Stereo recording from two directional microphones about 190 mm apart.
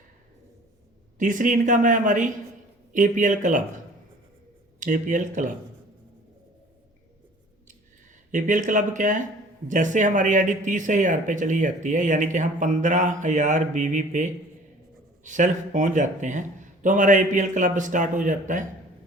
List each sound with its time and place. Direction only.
1.2 s speech: 45° right (ahead or behind)
4.8 s speech: 45° right (ahead or behind)
8.3 s speech: 40° right (ahead or behind)